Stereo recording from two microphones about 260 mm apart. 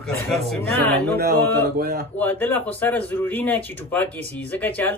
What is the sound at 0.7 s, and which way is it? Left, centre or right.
Speech, right.